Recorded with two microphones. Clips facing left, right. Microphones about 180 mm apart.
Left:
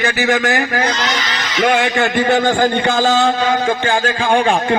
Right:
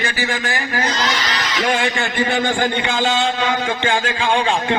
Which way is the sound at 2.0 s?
50° left (ahead or behind).